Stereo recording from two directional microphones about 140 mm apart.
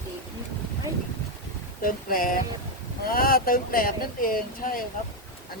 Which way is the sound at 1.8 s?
85° left.